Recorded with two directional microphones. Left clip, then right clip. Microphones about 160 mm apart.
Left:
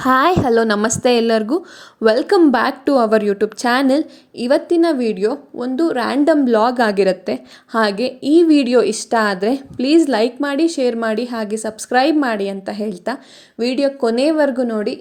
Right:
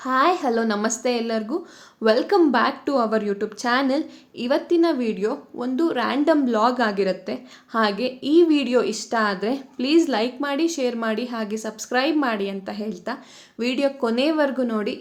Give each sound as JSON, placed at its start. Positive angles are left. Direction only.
{"t": 0.0, "sound": "speech", "side_deg": 70}
{"t": 13.6, "sound": "speech", "side_deg": 30}